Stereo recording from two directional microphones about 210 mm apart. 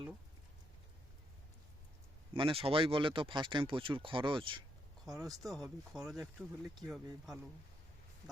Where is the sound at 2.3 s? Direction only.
25° right (ahead or behind).